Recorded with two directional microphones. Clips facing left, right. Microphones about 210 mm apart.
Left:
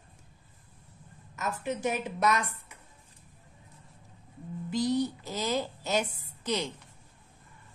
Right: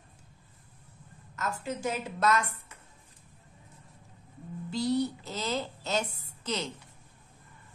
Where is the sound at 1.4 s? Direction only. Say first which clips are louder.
Left 2 dB; 20° left (ahead or behind).